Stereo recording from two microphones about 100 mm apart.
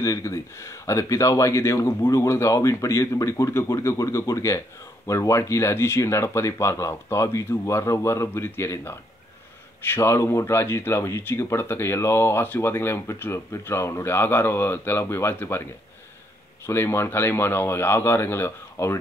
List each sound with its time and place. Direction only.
0.0 s speech: 30° left (ahead or behind)
16.6 s speech: 25° left (ahead or behind)